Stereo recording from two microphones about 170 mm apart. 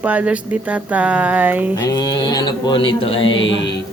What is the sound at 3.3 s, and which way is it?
Speech, 90° left.